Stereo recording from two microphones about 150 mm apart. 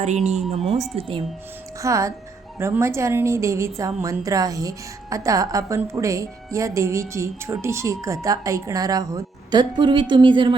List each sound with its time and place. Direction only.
0.0 s speech: 50° right (ahead or behind)
1.8 s a woman's voice: 20° right (ahead or behind)